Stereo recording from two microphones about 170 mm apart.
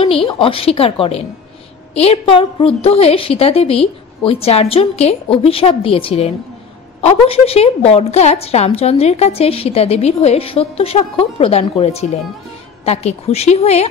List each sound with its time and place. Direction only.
0.0 s a woman's voice: 30° left (ahead or behind)